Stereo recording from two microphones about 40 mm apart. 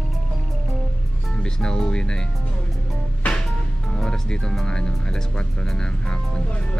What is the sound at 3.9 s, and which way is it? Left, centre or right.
Speech, centre.